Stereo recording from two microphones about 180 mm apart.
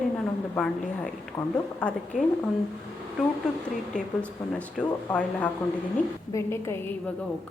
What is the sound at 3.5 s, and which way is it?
A woman's voice, 5° left (ahead or behind).